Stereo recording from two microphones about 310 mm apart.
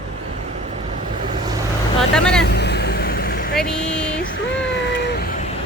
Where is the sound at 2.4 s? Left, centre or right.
Left.